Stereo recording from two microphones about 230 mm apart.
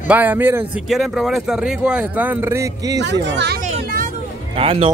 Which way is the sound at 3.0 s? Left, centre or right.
Right.